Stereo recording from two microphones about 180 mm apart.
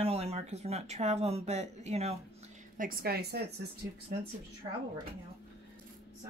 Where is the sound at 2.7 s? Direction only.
55° right (ahead or behind).